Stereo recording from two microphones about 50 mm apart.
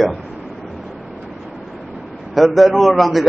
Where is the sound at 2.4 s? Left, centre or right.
Centre.